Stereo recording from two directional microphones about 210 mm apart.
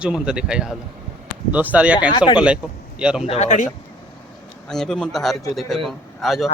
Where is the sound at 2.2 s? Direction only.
25° left (ahead or behind).